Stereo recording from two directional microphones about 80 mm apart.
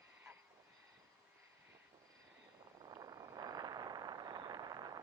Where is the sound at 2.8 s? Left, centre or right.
Right.